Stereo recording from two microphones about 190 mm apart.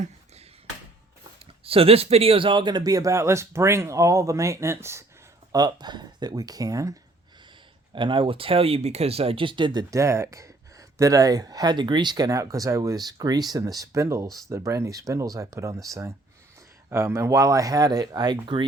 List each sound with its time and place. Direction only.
1.6 s speech: 30° right (ahead or behind)